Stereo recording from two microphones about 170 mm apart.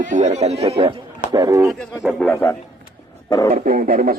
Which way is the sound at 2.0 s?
10° left (ahead or behind).